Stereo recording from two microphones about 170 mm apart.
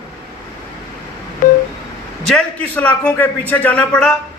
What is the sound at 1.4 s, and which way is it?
Telephone dialing, 50° left (ahead or behind).